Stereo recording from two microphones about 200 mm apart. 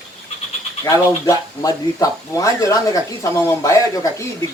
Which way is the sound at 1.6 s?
15° left (ahead or behind).